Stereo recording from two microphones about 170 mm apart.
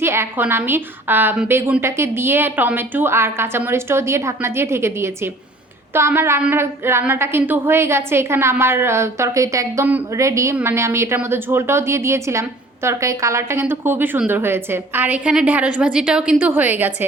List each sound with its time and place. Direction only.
0.0 s a woman's voice: 15° right (ahead or behind)